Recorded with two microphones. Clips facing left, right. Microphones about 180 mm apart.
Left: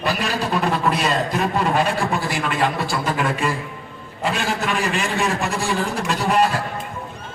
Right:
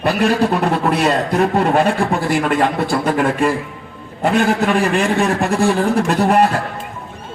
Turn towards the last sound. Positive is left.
turn(degrees=-55)  # may be behind; listen again after turning